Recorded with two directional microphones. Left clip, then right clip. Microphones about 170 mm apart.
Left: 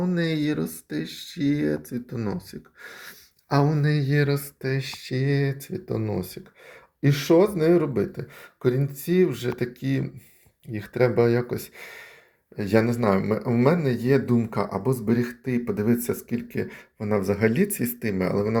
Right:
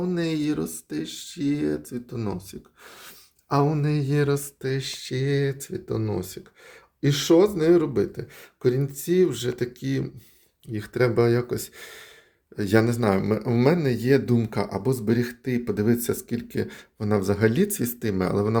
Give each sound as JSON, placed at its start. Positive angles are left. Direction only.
{"t": 0.0, "sound": "speech", "side_deg": 0}
{"t": 3.8, "sound": "speech", "side_deg": -5}
{"t": 10.8, "sound": "speech", "side_deg": -15}